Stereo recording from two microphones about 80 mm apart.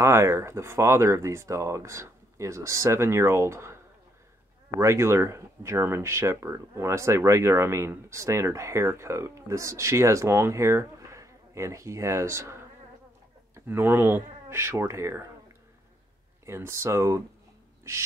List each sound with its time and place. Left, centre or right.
0.0 s speech: right
4.7 s speech: right
13.7 s speech: right
16.4 s speech: right